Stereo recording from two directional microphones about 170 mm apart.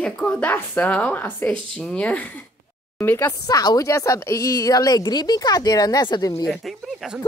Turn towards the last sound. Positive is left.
turn(degrees=0)  # may be behind; listen again after turning